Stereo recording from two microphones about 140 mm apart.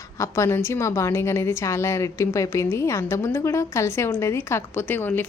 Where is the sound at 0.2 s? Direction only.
20° left (ahead or behind).